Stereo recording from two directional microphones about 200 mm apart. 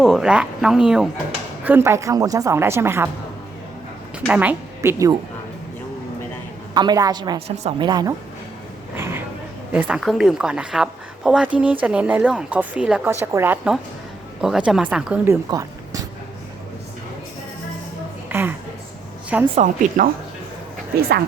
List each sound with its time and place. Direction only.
0.0 s a woman's voice: centre (ahead or behind)
4.2 s a woman's voice: 5° right (ahead or behind)
6.7 s a woman's voice: 20° right (ahead or behind)
9.0 s a sound: 10° right (ahead or behind)
9.7 s a woman's voice: 5° right (ahead or behind)
18.3 s a sound: 10° right (ahead or behind)
19.5 s a woman's voice: 40° right (ahead or behind)